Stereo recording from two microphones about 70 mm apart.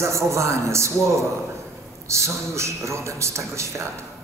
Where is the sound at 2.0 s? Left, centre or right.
Right.